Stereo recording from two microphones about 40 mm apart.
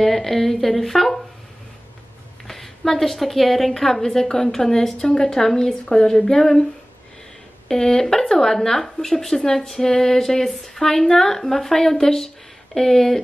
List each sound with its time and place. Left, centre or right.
0.0 s a woman's voice: centre
2.4 s a woman's voice: centre
7.6 s a woman's voice: centre